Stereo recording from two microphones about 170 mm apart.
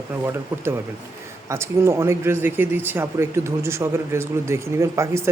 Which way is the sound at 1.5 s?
15° right (ahead or behind).